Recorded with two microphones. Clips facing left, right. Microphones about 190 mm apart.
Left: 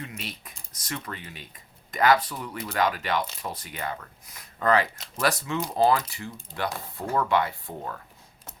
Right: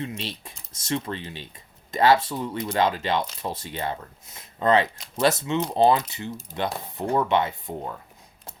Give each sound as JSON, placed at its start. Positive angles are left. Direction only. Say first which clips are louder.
{"t": 0.0, "sound": "speech", "louder": "right 6 dB", "side_deg": -30}